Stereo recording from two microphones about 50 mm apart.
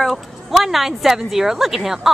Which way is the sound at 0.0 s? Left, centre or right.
Centre.